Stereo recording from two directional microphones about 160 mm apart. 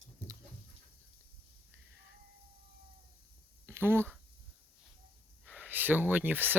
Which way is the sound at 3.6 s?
15° right (ahead or behind).